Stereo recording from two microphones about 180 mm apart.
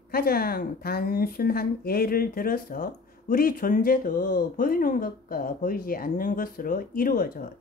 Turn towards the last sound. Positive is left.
turn(degrees=55)  # may be behind; listen again after turning